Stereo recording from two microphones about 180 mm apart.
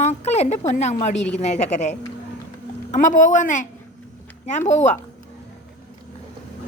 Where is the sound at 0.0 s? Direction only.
40° left (ahead or behind).